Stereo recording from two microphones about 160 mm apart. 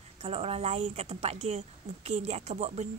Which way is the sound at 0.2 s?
40° right (ahead or behind).